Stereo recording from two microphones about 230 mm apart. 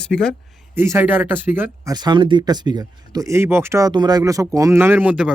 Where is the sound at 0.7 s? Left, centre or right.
Centre.